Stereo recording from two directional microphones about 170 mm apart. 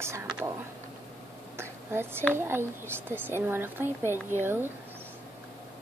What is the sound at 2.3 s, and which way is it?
Speech, 15° right (ahead or behind).